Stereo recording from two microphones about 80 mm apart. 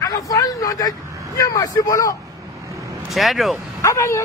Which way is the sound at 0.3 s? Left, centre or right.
Left.